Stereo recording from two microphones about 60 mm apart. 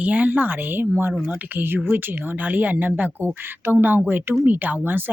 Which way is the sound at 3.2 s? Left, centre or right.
Right.